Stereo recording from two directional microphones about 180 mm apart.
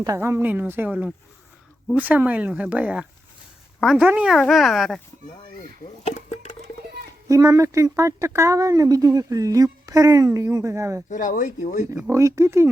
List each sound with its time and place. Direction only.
0.0 s a woman's voice: 15° right (ahead or behind); by 4.9 s centre (ahead or behind)
6.1 s a sound: 40° left (ahead or behind)
7.3 s speech: 20° right (ahead or behind)
11.1 s speech: 45° left (ahead or behind)
11.9 s speech: 15° right (ahead or behind)